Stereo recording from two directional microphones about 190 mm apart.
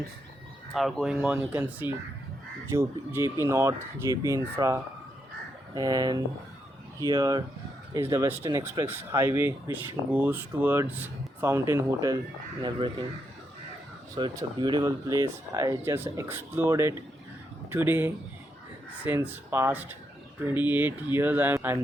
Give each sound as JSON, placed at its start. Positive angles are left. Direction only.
{"t": 0.7, "sound": "speech", "side_deg": 0}
{"t": 14.2, "sound": "speech", "side_deg": -25}